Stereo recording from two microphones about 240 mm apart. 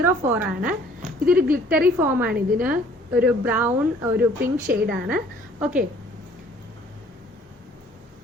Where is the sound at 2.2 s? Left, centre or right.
Right.